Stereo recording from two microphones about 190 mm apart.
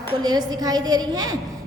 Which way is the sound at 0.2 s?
20° right (ahead or behind).